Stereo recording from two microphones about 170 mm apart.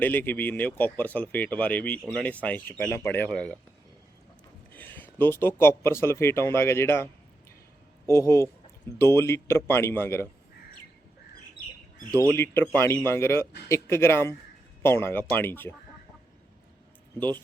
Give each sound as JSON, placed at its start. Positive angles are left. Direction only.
{"t": 0.0, "sound": "speech", "side_deg": 10}
{"t": 4.7, "sound": "speech", "side_deg": 10}
{"t": 12.6, "sound": "speech", "side_deg": 10}